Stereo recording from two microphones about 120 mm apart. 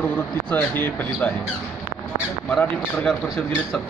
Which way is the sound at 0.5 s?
15° left (ahead or behind).